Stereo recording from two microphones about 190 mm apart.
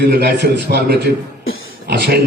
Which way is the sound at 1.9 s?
55° right (ahead or behind).